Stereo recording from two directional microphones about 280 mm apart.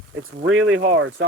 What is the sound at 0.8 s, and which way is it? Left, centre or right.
Speech, right.